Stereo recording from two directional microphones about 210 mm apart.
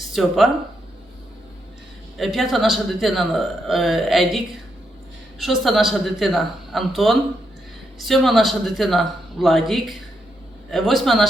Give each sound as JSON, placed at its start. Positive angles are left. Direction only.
{"t": 0.0, "sound": "speech", "side_deg": 0}
{"t": 2.1, "sound": "a man's voice", "side_deg": 0}
{"t": 5.4, "sound": "a man's voice", "side_deg": 0}